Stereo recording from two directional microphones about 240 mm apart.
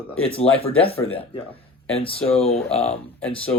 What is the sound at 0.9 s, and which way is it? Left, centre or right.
Speech, left.